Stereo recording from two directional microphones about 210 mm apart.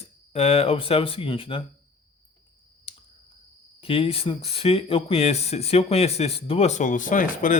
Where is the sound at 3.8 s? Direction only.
25° left (ahead or behind).